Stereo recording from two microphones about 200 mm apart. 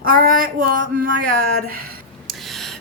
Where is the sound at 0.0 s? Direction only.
45° right (ahead or behind).